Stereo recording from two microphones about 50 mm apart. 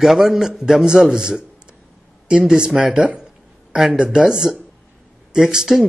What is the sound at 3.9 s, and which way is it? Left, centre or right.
Speech, centre.